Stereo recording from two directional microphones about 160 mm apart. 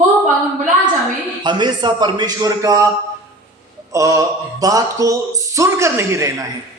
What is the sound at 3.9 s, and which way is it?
A woman's voice, 20° right (ahead or behind).